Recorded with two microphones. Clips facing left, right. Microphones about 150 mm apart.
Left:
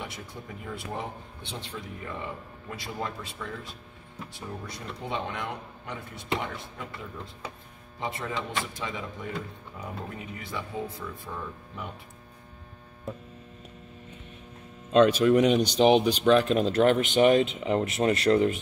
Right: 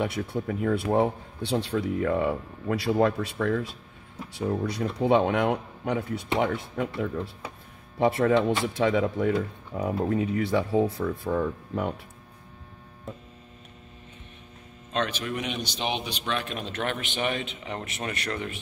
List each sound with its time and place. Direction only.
0.0 s a man's voice: 65° right (ahead or behind)
8.0 s speech: 80° right
15.3 s a man's voice: 35° left (ahead or behind)